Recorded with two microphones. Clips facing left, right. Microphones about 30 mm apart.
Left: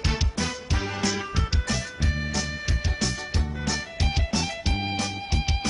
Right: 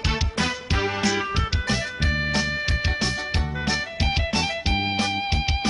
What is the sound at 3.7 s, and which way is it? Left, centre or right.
Music, right.